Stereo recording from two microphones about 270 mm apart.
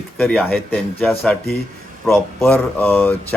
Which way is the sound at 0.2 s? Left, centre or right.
Centre.